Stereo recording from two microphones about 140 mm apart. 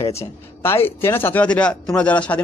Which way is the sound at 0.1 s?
20° left (ahead or behind).